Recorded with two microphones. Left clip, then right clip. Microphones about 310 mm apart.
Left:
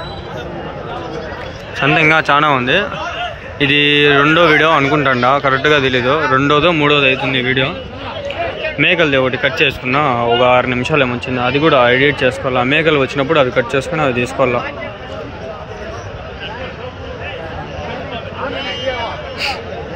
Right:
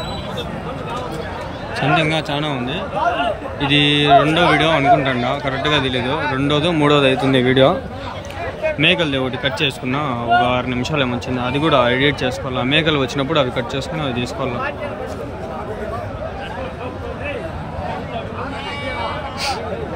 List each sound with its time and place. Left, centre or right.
1.8 s speech: centre
8.7 s speech: centre